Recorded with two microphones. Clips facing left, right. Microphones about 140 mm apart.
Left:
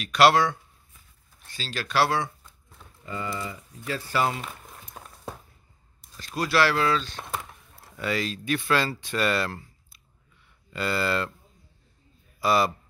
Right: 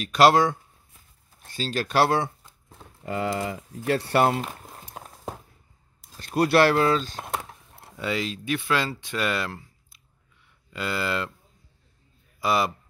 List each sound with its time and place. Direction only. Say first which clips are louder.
0.0 s speech: right 2 dB; 40° right (ahead or behind)
3.1 s speech: right 6 dB; 70° right (ahead or behind)
4.6 s a sound: right 3 dB; 35° right (ahead or behind)
6.1 s speech: right 5 dB; 55° right (ahead or behind)
7.8 s speech: even; 20° right (ahead or behind)
10.7 s speech: left 1 dB; 15° right (ahead or behind)
12.4 s a man's voice: left 1 dB; 15° right (ahead or behind)